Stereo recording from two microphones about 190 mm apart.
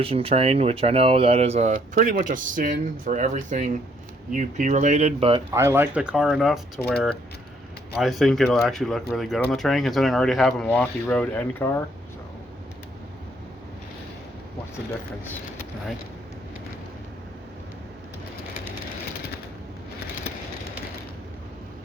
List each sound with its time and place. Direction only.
0.0 s speech: 30° right (ahead or behind)
2.0 s speech: 50° right (ahead or behind); by 5.4 s 30° right (ahead or behind)
5.5 s speech: 15° right (ahead or behind); by 11.8 s 10° left (ahead or behind)